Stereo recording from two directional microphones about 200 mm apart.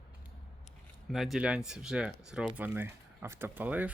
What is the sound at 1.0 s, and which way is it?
Speech, centre (ahead or behind).